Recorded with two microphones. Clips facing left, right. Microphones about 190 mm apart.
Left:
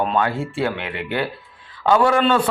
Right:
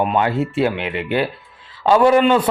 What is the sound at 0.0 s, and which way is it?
Speech, 10° right (ahead or behind).